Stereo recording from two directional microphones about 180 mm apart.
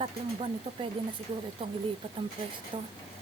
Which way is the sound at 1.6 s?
30° right (ahead or behind).